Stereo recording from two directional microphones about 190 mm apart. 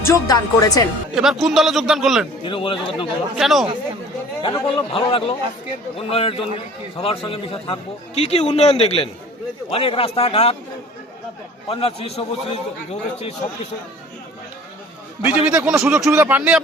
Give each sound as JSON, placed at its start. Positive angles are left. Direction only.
{"t": 0.0, "sound": "a man's voice", "side_deg": 20}
{"t": 1.1, "sound": "a man's voice", "side_deg": 0}
{"t": 2.4, "sound": "a man's voice", "side_deg": 25}
{"t": 3.3, "sound": "a man's voice", "side_deg": 0}
{"t": 4.4, "sound": "a man's voice", "side_deg": 25}
{"t": 11.7, "sound": "a man's voice", "side_deg": 30}
{"t": 15.2, "sound": "a man's voice", "side_deg": -5}